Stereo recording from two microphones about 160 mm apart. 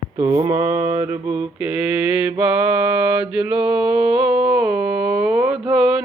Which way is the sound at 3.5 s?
25° right (ahead or behind).